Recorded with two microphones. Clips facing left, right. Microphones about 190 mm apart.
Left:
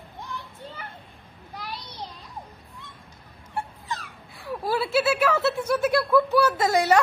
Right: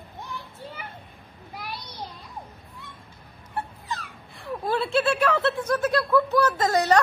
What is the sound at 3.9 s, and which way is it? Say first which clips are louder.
Speech: even; centre (ahead or behind).